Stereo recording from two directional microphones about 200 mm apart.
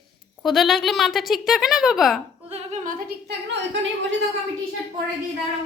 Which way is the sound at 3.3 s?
60° right (ahead or behind).